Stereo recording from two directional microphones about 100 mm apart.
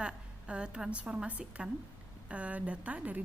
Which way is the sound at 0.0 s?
10° right (ahead or behind).